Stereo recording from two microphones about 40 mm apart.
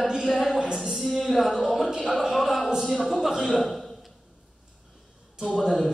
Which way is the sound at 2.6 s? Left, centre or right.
Centre.